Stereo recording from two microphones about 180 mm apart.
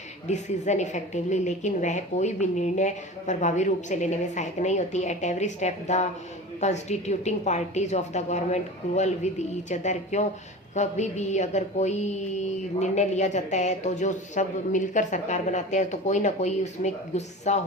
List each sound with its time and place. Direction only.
0.3 s a woman's voice: 40° left (ahead or behind)